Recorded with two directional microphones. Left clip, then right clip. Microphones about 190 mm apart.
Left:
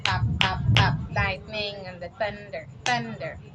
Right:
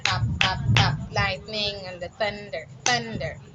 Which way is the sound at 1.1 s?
40° right (ahead or behind).